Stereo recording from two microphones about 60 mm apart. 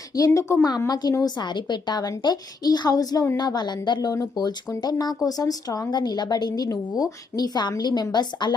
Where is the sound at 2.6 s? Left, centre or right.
Left.